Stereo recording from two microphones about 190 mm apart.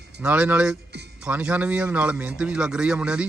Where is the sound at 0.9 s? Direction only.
60° right (ahead or behind).